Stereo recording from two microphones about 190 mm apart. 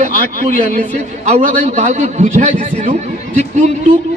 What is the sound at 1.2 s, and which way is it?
A man's voice, 40° right (ahead or behind).